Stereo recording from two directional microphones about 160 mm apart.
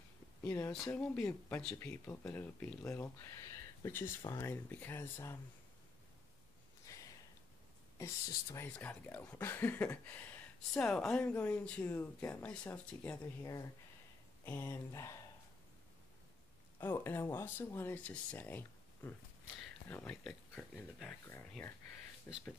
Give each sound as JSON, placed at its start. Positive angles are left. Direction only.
{"t": 0.4, "sound": "speech", "side_deg": 15}
{"t": 6.9, "sound": "a sound", "side_deg": 20}
{"t": 8.0, "sound": "speech", "side_deg": 15}
{"t": 13.4, "sound": "speech", "side_deg": 20}
{"t": 16.8, "sound": "speech", "side_deg": 15}